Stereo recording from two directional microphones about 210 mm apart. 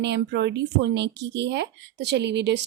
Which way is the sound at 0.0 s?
55° right (ahead or behind).